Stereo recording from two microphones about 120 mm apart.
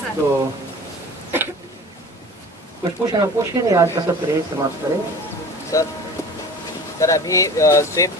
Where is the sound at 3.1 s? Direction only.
30° right (ahead or behind).